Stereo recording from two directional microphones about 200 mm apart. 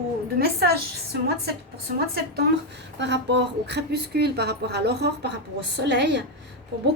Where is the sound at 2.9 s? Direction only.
60° right (ahead or behind).